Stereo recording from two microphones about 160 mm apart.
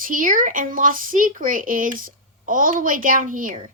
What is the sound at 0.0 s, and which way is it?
Speech, 55° right (ahead or behind).